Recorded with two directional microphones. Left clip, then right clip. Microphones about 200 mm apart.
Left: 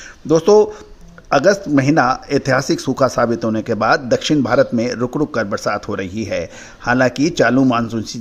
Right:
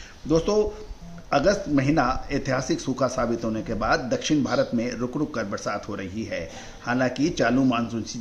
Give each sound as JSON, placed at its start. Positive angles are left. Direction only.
{"t": 0.3, "sound": "speech", "side_deg": 45}